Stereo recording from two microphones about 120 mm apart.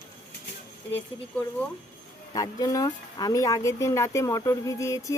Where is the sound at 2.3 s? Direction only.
30° left (ahead or behind).